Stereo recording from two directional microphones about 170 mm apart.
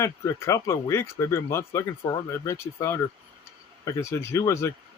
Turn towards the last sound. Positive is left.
turn(degrees=15)  # may be behind; listen again after turning